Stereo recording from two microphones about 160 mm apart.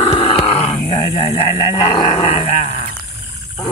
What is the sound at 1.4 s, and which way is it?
Speech, 30° left (ahead or behind).